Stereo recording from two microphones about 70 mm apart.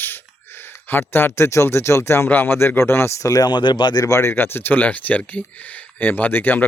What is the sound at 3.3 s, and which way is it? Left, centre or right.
Speech, left.